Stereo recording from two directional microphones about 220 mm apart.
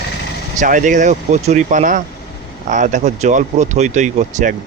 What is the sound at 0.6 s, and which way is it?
Speech, 35° right (ahead or behind).